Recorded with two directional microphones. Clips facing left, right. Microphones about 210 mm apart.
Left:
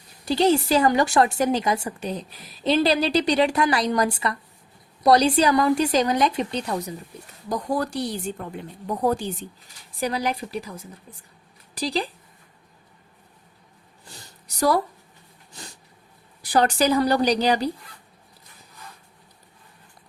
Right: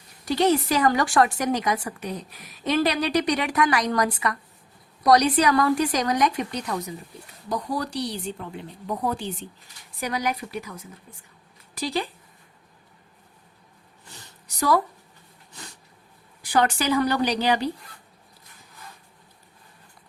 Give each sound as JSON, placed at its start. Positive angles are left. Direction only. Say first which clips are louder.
{"t": 0.3, "sound": "a woman's voice", "louder": "left 2 dB", "side_deg": 30}
{"t": 7.5, "sound": "a woman's voice", "louder": "left 3 dB", "side_deg": 50}
{"t": 16.4, "sound": "speech", "louder": "left 3 dB", "side_deg": 35}